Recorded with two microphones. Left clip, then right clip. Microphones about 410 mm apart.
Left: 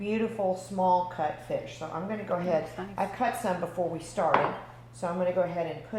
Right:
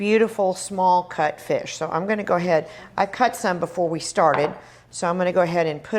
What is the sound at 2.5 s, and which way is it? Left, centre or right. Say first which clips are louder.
A woman's voice: right 8 dB; right.